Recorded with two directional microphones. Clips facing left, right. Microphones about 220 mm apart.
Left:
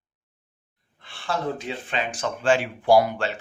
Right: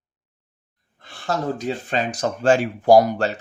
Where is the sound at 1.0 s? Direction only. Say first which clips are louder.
Right 3 dB; 40° right (ahead or behind).